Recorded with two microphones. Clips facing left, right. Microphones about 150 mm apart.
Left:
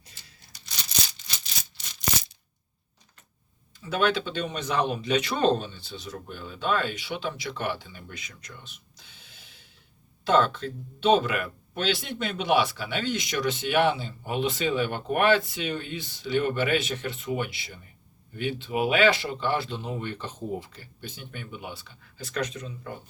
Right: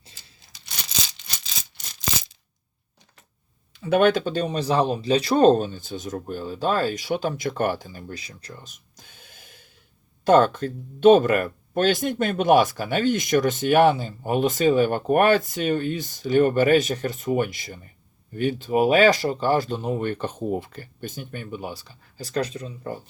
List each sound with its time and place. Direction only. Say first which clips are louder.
0.1 s tearing: even; 90° right
3.8 s speech: right 7 dB; 60° right (ahead or behind); by 23.0 s 35° right (ahead or behind)